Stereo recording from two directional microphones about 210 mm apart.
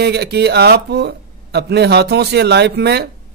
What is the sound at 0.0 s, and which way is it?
Speech, 50° right (ahead or behind).